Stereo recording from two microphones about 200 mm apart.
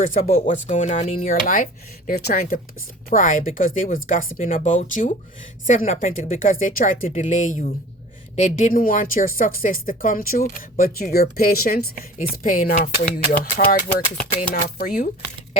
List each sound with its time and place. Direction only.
0.0 s a woman's voice: 40° left (ahead or behind)